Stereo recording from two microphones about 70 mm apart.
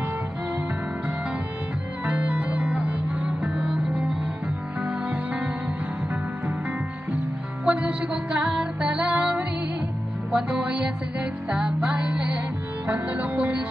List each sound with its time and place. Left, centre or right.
2.0 s music: centre
4.8 s music: right
7.6 s music: centre